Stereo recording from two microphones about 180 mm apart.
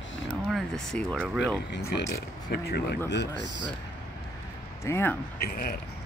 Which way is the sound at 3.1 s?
75° left (ahead or behind).